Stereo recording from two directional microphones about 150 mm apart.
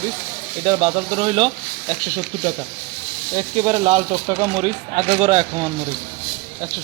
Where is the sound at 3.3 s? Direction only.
40° right (ahead or behind).